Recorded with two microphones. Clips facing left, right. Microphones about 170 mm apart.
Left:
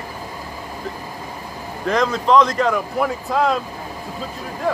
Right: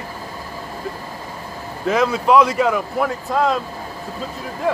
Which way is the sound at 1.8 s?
5° right (ahead or behind).